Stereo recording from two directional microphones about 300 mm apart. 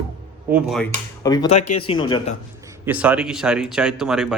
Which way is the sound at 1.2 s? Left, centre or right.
Centre.